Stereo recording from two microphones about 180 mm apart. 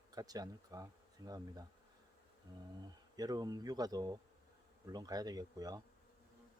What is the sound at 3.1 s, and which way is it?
Speech, 20° right (ahead or behind).